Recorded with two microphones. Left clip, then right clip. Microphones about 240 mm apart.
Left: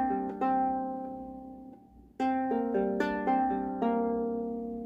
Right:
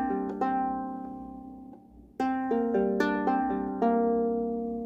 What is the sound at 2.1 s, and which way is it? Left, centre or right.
Music, right.